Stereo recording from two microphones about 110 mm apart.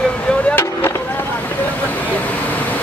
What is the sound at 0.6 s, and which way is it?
Vehicle, 25° left (ahead or behind).